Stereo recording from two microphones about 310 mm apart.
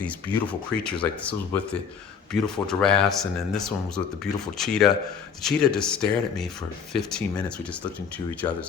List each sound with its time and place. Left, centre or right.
0.9 s speech: centre